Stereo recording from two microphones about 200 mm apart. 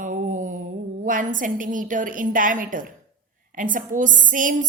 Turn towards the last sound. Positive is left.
turn(degrees=-40)  # may be behind; listen again after turning